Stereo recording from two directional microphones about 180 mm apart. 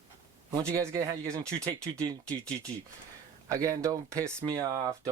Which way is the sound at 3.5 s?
15° right (ahead or behind).